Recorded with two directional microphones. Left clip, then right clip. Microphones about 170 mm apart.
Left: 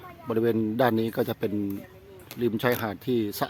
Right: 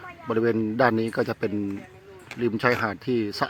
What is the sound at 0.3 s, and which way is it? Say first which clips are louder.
Speech: right 2 dB; 10° left (ahead or behind).